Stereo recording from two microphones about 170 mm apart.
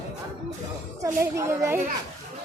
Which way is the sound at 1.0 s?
20° right (ahead or behind).